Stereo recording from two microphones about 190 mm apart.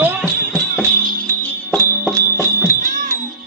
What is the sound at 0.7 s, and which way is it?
Music, 5° left (ahead or behind).